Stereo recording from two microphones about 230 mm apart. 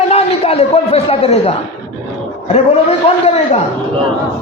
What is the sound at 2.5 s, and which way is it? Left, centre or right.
A man's voice, left.